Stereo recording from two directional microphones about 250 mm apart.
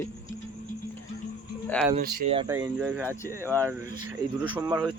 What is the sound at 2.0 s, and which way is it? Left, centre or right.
Speech, right.